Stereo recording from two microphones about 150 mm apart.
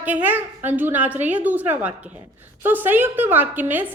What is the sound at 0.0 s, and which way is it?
A woman's voice, 10° right (ahead or behind).